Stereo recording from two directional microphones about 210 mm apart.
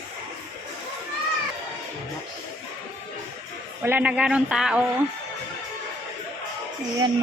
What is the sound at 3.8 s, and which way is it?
A man's voice, 10° right (ahead or behind).